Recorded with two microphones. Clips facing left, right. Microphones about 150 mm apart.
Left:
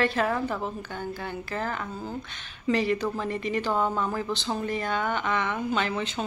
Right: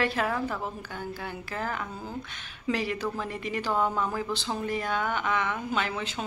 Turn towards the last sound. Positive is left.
turn(degrees=-5)  # may be behind; listen again after turning